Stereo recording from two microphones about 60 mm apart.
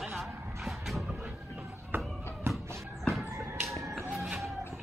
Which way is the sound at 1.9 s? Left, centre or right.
Right.